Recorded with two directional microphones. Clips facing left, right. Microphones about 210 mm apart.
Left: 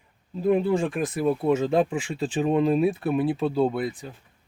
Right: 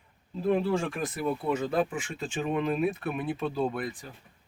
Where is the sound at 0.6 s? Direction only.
15° left (ahead or behind).